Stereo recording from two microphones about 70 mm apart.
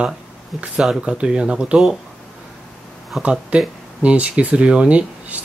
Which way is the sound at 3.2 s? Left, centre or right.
Centre.